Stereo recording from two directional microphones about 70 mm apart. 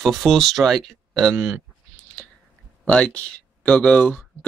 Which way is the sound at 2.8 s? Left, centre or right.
Centre.